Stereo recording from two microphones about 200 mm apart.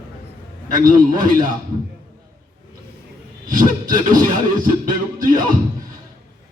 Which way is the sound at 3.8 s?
40° right (ahead or behind).